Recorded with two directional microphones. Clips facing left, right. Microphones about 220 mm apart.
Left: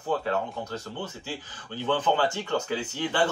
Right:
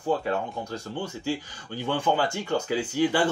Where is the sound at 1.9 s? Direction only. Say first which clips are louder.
Even; 10° right (ahead or behind).